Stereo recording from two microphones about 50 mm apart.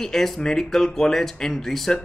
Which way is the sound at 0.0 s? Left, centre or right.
Centre.